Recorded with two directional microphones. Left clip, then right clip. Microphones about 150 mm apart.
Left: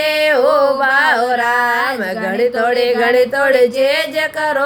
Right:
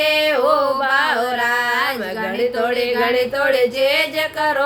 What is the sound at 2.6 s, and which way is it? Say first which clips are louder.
Carnatic music: left 5 dB; 35° left (ahead or behind).